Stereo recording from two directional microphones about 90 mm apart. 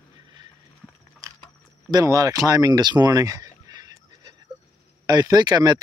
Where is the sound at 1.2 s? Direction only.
40° right (ahead or behind).